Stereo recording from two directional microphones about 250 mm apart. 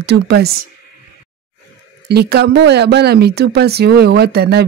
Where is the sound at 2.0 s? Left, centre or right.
Right.